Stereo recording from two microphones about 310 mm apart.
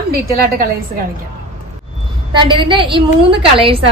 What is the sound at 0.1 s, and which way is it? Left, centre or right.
Speech, right.